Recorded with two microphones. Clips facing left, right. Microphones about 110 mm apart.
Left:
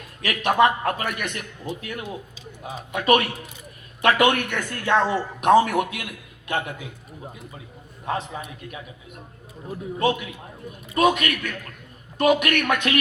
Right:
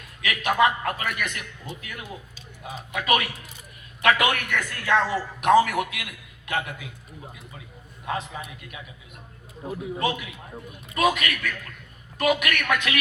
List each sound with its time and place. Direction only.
0.2 s a man's voice: 35° left (ahead or behind)
8.0 s a man's voice: 30° left (ahead or behind)
10.0 s a man's voice: 30° left (ahead or behind)